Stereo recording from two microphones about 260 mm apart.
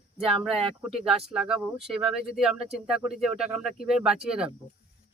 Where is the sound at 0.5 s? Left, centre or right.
Right.